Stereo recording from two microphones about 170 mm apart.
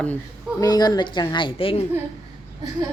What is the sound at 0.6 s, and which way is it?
A woman's voice, 25° left (ahead or behind).